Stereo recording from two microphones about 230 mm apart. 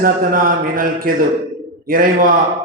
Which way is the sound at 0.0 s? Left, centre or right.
Right.